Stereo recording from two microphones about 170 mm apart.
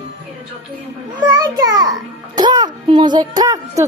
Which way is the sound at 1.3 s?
20° right (ahead or behind).